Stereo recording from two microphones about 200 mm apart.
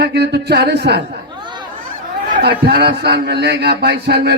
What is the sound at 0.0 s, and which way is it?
A man's voice, 55° right (ahead or behind).